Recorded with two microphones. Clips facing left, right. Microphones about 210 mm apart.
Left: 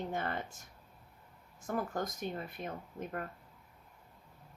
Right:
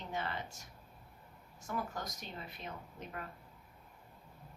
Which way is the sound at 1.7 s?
50° left (ahead or behind).